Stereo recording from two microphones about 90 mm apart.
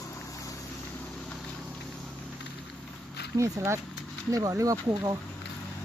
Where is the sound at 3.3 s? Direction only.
35° right (ahead or behind).